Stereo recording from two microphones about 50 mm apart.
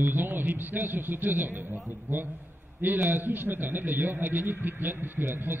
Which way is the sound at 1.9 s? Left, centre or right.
Right.